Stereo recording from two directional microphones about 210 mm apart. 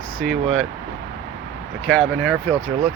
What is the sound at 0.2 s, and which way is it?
Speech, centre (ahead or behind).